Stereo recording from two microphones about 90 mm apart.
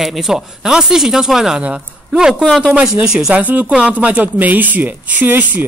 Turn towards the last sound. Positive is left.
turn(degrees=-20)  # may be behind; listen again after turning